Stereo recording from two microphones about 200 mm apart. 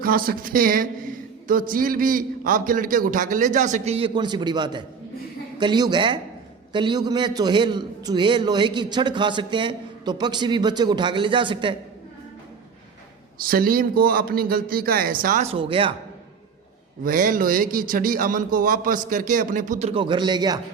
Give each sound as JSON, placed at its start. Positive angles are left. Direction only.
{"t": 0.0, "sound": "a man's voice", "side_deg": -45}
{"t": 13.4, "sound": "speech", "side_deg": -45}
{"t": 17.0, "sound": "speech", "side_deg": -45}
{"t": 19.9, "sound": "a man's voice", "side_deg": -25}